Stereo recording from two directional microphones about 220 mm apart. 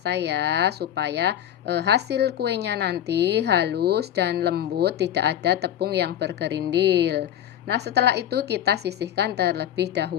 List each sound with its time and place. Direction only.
0.0 s speech: 50° right (ahead or behind)